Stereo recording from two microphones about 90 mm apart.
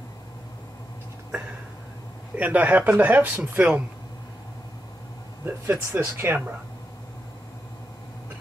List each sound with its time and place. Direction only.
2.3 s speech: 15° right (ahead or behind)
5.4 s speech: 25° right (ahead or behind)